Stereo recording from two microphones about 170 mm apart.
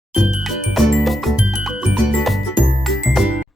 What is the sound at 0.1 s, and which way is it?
Music, centre (ahead or behind).